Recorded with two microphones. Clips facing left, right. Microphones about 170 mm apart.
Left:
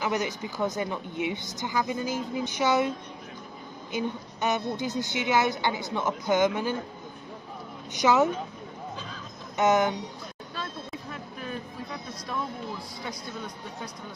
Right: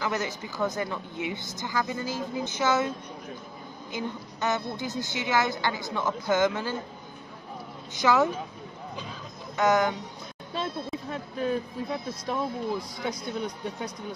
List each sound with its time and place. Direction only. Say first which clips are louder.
0.0 s a woman's voice: left 2 dB; 15° left (ahead or behind)
3.9 s a woman's voice: left 3 dB; 15° left (ahead or behind)
7.9 s a woman's voice: left 1 dB; 20° left (ahead or behind)
9.6 s a woman's voice: left 1 dB; 20° left (ahead or behind)
12.3 s speech: right 5 dB; 20° right (ahead or behind)